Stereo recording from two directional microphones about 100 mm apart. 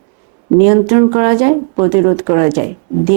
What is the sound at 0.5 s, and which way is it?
Speech, 20° right (ahead or behind).